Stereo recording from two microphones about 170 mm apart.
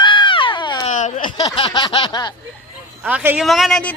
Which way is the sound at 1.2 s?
25° left (ahead or behind).